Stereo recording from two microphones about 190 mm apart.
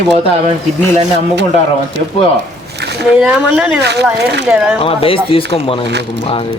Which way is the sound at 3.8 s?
60° right (ahead or behind).